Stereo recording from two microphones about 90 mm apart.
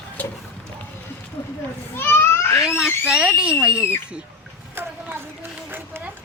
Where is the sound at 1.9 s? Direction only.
25° left (ahead or behind).